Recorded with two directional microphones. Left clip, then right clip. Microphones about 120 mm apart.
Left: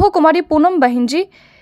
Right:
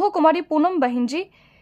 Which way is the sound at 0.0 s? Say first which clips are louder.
Left 6 dB; 35° left (ahead or behind).